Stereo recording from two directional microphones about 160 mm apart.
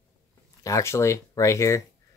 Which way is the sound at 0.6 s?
20° left (ahead or behind).